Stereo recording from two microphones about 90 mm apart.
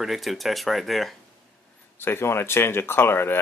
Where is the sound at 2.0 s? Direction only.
25° left (ahead or behind).